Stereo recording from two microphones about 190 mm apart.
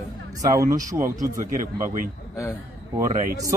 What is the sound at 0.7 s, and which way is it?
A man's voice, 45° right (ahead or behind).